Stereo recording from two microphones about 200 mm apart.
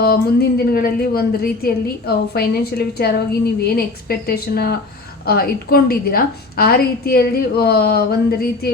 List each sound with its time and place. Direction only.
0.0 s a woman's voice: 50° left (ahead or behind)